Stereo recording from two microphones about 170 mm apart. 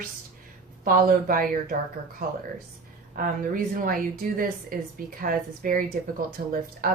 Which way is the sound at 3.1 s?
55° right (ahead or behind).